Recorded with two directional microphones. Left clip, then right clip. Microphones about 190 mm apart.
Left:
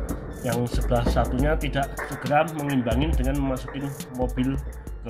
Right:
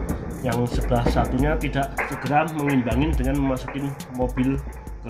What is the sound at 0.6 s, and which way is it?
Speech, 15° left (ahead or behind).